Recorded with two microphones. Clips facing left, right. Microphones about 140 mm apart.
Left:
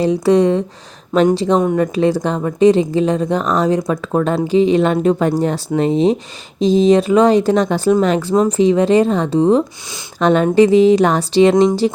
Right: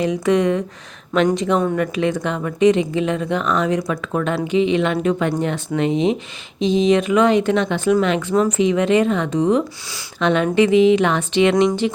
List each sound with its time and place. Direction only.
0.0 s a woman's voice: 35° left (ahead or behind)
1.5 s a woman's voice: 20° left (ahead or behind)